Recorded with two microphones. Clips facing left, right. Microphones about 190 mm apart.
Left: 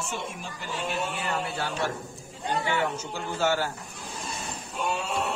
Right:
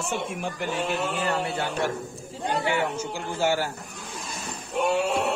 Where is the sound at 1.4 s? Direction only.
20° right (ahead or behind).